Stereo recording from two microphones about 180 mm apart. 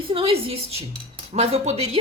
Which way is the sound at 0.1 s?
30° right (ahead or behind).